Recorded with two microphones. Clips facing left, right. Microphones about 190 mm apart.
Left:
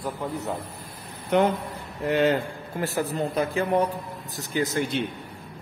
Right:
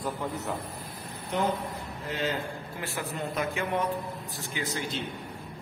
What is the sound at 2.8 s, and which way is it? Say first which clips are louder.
Speech: left 9 dB; 40° left (ahead or behind).